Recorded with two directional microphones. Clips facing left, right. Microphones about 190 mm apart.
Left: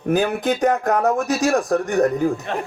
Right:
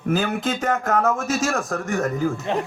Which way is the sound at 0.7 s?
35° left (ahead or behind).